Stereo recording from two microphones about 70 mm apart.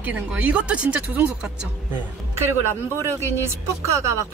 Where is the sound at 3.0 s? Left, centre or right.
Right.